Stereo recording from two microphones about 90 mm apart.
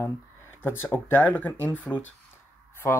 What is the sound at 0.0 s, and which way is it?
Speech, 25° left (ahead or behind).